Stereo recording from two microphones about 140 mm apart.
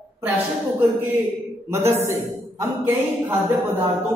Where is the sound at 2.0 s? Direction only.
20° right (ahead or behind).